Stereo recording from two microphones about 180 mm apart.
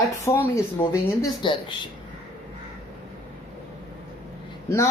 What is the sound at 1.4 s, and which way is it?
Speech, 25° left (ahead or behind).